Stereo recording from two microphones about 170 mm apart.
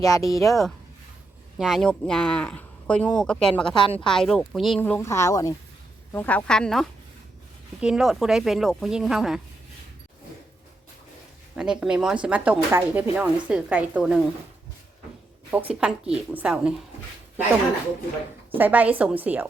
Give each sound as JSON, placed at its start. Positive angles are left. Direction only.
{"t": 0.0, "sound": "speech", "side_deg": 20}
{"t": 0.3, "sound": "speech", "side_deg": 0}
{"t": 3.8, "sound": "a woman's voice", "side_deg": 30}
{"t": 4.0, "sound": "speech", "side_deg": 5}
{"t": 4.8, "sound": "a woman's voice", "side_deg": 15}
{"t": 6.1, "sound": "speech", "side_deg": 10}
{"t": 11.5, "sound": "speech", "side_deg": -5}
{"t": 15.4, "sound": "speech", "side_deg": -10}
{"t": 18.5, "sound": "speech", "side_deg": -10}